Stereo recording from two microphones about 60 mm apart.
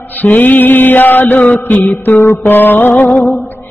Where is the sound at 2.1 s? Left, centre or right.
Left.